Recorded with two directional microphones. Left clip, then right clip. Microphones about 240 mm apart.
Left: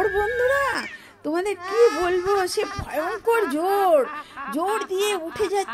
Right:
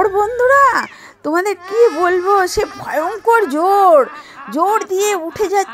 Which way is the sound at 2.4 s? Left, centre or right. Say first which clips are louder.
Right 8 dB; centre.